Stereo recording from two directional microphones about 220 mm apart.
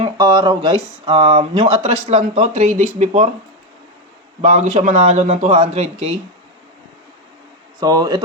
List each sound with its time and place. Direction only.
0.0 s speech: 20° right (ahead or behind)
4.4 s speech: 30° right (ahead or behind)
7.8 s speech: 15° right (ahead or behind)